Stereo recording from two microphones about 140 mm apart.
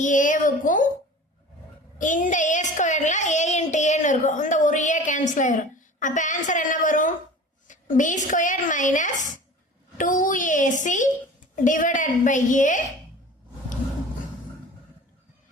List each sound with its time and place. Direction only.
0.0 s a woman's voice: 65° left (ahead or behind)
2.0 s child singing: 65° left (ahead or behind)
7.7 s a woman's voice: 65° left (ahead or behind)